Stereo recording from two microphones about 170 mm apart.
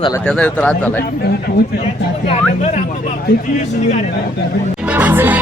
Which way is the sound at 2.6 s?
40° left (ahead or behind).